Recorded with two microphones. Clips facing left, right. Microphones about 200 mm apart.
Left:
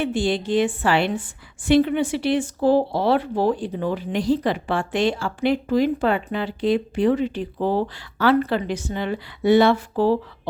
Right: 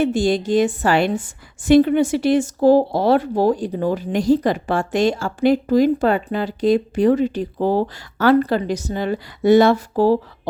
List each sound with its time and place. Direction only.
0.0 s a woman's voice: 45° right (ahead or behind)